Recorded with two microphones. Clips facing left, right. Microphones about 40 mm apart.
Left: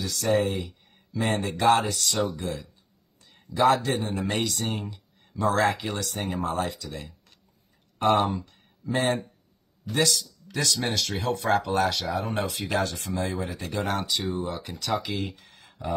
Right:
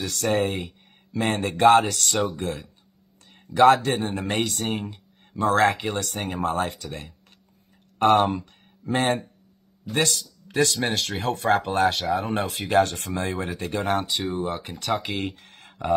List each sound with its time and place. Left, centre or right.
0.0 s speech: right